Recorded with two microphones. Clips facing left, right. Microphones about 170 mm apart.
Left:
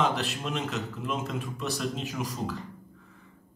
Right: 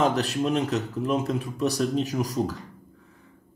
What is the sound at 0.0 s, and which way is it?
Speech, 40° right (ahead or behind).